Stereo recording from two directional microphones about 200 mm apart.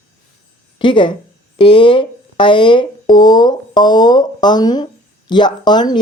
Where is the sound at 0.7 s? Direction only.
25° left (ahead or behind).